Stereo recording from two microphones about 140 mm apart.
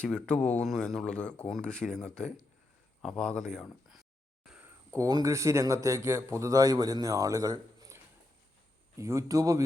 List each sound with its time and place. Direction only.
0.0 s speech: 5° left (ahead or behind)
4.4 s a sound: 5° right (ahead or behind)
4.9 s speech: 25° right (ahead or behind)